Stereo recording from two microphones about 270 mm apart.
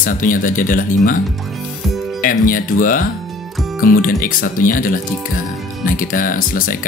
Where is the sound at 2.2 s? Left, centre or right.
Left.